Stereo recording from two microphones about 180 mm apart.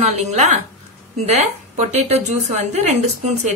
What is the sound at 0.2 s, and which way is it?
A woman's voice, 40° right (ahead or behind).